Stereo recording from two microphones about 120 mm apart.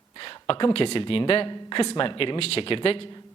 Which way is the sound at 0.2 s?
50° left (ahead or behind).